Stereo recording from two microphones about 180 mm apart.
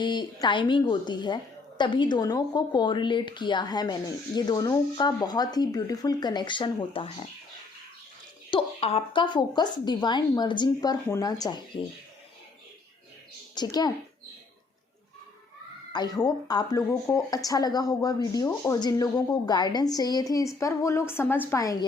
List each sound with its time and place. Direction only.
0.0 s speech: 25° left (ahead or behind)
8.4 s speech: 30° left (ahead or behind)
13.6 s speech: 20° left (ahead or behind)
15.9 s a woman's voice: 20° left (ahead or behind)